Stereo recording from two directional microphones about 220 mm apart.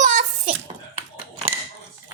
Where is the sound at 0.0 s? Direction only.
35° right (ahead or behind).